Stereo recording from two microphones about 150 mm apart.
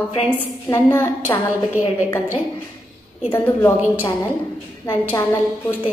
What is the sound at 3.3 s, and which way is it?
Speech, 15° left (ahead or behind).